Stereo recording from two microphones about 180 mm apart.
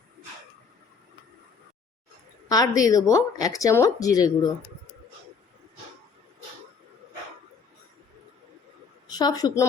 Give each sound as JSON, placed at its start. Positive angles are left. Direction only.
{"t": 2.5, "sound": "speech", "side_deg": 20}
{"t": 9.0, "sound": "a woman's voice", "side_deg": 20}